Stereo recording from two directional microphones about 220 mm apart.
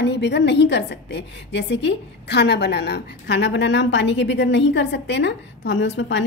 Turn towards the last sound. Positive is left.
turn(degrees=55)  # may be behind; listen again after turning